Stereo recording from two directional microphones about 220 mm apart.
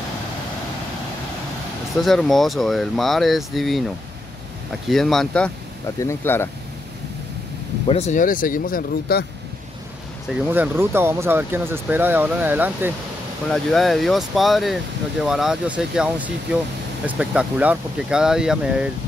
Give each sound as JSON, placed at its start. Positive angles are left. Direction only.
{"t": 2.0, "sound": "speech", "side_deg": 0}
{"t": 4.8, "sound": "speech", "side_deg": 0}
{"t": 7.8, "sound": "speech", "side_deg": 30}
{"t": 10.5, "sound": "speech", "side_deg": -10}